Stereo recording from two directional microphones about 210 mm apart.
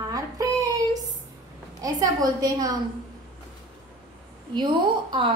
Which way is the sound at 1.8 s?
15° right (ahead or behind).